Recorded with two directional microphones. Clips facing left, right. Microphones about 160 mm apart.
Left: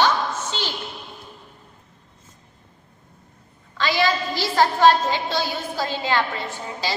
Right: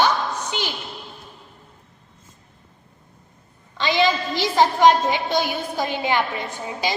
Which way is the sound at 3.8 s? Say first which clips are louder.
Right 2 dB; 20° right (ahead or behind).